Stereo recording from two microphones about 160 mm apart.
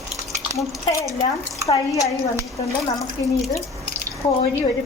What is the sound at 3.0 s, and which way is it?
Speech, 20° left (ahead or behind).